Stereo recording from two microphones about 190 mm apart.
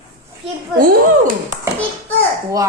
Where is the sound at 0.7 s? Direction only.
45° right (ahead or behind).